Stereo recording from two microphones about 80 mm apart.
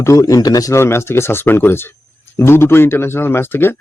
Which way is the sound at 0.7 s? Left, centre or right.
Left.